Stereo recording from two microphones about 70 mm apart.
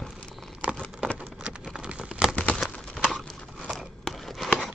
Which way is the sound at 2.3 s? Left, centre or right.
Centre.